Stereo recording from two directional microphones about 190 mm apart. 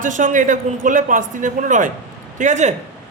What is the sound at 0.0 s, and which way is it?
A man's voice, 45° right (ahead or behind).